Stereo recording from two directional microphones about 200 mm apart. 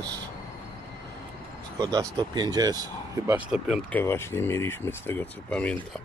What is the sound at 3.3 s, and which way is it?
Speech, 5° right (ahead or behind).